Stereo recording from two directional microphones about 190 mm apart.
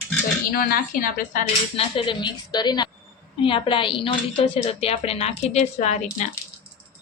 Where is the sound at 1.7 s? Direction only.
25° left (ahead or behind).